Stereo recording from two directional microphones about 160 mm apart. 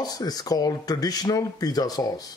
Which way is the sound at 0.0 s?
25° left (ahead or behind).